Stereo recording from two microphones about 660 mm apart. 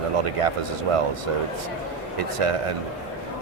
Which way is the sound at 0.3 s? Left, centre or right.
Right.